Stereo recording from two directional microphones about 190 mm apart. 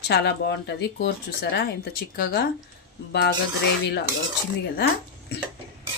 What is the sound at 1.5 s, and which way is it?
Speech, 60° left (ahead or behind).